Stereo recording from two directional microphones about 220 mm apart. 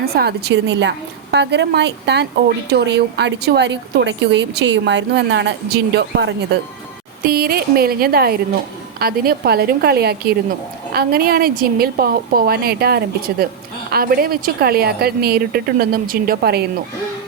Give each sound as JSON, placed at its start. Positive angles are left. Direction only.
{"t": 0.0, "sound": "a woman's voice", "side_deg": -45}